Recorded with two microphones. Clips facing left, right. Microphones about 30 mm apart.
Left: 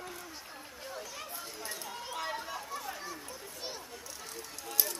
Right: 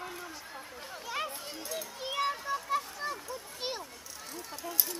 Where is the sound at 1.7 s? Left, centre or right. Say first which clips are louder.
Right 8 dB; right.